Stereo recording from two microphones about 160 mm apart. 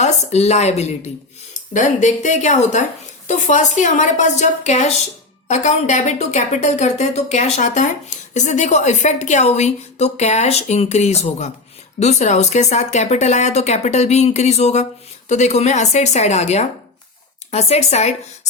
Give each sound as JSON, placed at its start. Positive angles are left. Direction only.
{"t": 0.0, "sound": "speech", "side_deg": 45}